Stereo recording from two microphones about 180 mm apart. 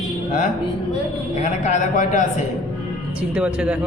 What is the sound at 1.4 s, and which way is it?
Speech, 40° left (ahead or behind).